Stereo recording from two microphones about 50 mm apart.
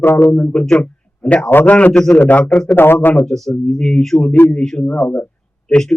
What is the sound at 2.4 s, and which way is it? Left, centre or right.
Speech, centre.